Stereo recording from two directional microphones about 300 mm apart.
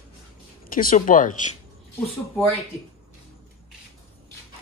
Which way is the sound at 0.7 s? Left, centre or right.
Left.